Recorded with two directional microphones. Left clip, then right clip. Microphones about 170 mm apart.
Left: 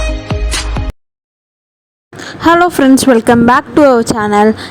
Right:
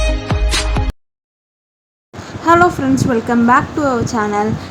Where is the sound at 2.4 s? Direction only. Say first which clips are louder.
Left 3 dB; 45° left (ahead or behind).